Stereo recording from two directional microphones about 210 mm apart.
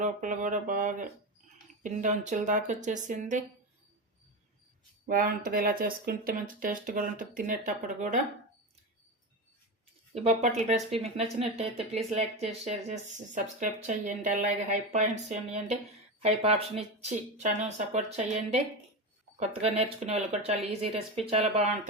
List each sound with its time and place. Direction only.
0.0 s speech: 35° right (ahead or behind)
5.0 s speech: 40° right (ahead or behind)
10.2 s speech: 30° right (ahead or behind)